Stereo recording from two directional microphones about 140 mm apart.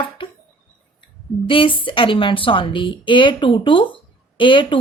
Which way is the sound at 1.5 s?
40° left (ahead or behind).